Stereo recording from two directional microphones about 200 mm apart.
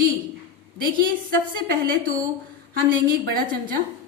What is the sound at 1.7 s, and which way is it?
A woman's voice, 45° right (ahead or behind).